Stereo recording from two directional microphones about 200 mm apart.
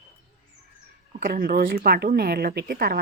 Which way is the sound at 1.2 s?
45° right (ahead or behind).